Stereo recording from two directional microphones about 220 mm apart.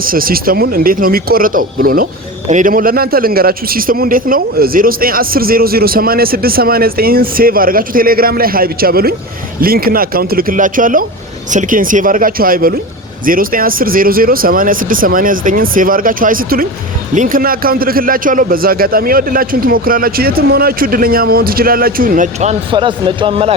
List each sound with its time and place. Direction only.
0.0 s a man's voice: 40° right (ahead or behind); by 23.6 s 25° right (ahead or behind)